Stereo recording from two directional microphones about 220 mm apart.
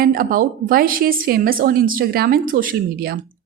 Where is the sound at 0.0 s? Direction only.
40° right (ahead or behind).